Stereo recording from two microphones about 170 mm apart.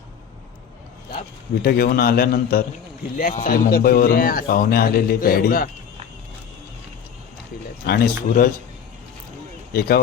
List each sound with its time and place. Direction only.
1.6 s a man's voice: 65° left (ahead or behind)
7.9 s a man's voice: 60° left (ahead or behind)
9.7 s a man's voice: 65° left (ahead or behind)